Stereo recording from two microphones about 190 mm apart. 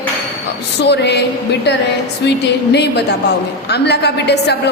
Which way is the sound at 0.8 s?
65° left (ahead or behind).